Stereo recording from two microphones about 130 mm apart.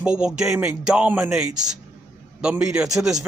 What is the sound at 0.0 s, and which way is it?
Speech, 5° right (ahead or behind).